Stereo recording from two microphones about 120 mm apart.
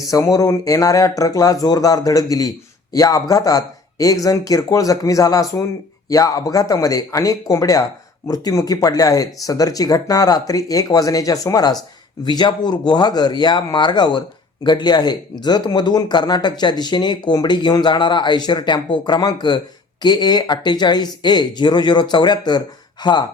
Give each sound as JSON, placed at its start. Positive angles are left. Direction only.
{"t": 0.1, "sound": "speech", "side_deg": 30}